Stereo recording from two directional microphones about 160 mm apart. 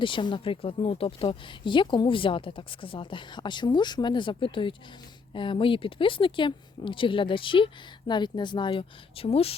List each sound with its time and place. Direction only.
0.0 s speech: 30° left (ahead or behind)